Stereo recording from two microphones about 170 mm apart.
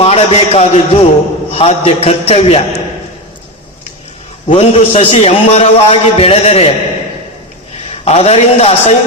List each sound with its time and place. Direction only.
0.0 s a man's voice: 35° left (ahead or behind)
4.4 s a man's voice: 40° left (ahead or behind)
7.9 s a man's voice: 35° left (ahead or behind)